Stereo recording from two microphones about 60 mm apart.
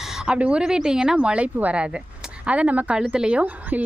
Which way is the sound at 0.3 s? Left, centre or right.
Centre.